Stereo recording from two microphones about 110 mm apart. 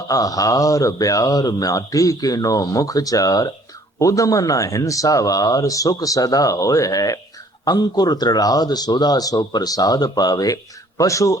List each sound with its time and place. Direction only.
0.1 s speech: 30° left (ahead or behind)